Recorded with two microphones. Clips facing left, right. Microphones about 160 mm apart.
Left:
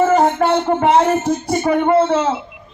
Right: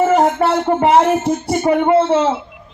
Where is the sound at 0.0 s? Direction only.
10° right (ahead or behind).